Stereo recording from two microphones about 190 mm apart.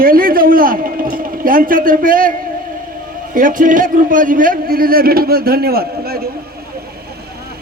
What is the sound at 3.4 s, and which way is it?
A man's voice, 45° right (ahead or behind).